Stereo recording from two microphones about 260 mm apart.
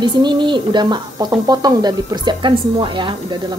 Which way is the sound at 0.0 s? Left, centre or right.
Centre.